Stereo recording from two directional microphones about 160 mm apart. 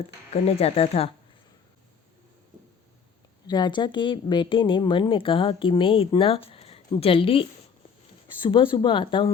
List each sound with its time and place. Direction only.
0.4 s speech: 40° left (ahead or behind)
3.4 s speech: 25° left (ahead or behind)